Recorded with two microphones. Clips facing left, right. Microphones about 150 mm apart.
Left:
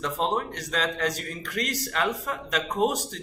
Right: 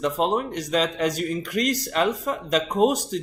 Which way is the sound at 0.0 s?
15° right (ahead or behind).